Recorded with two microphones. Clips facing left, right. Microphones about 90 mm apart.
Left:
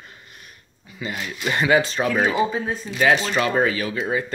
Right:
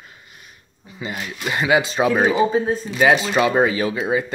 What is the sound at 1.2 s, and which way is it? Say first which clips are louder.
Speech: left 1 dB; 10° right (ahead or behind).